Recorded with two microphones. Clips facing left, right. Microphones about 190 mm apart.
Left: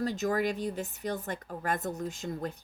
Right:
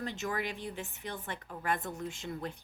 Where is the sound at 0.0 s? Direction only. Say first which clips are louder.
Left 7 dB; 40° left (ahead or behind).